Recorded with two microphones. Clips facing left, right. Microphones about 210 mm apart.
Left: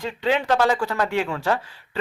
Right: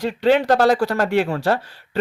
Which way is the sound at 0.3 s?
40° right (ahead or behind).